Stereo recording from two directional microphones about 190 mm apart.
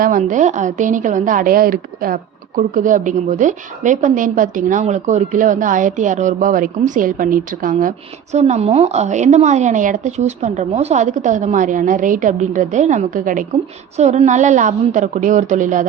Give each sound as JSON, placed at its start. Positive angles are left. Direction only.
{"t": 0.0, "sound": "a woman's voice", "side_deg": -45}